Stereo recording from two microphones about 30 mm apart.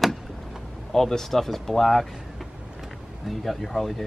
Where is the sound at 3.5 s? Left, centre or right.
Centre.